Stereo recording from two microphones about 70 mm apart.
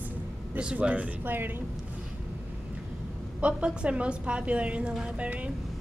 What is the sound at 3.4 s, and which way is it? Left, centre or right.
A woman's voice, centre.